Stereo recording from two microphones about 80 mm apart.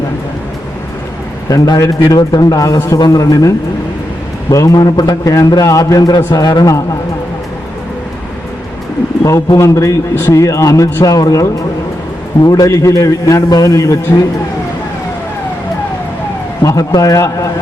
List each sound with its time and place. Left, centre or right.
1.5 s a man's voice: left
2.7 s a man's voice: left
3.0 s a man's voice: left
4.5 s a man's voice: left
9.2 s a man's voice: left
16.6 s a man's voice: left